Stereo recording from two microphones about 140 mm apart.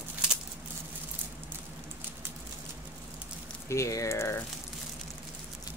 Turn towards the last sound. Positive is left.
turn(degrees=20)  # may be behind; listen again after turning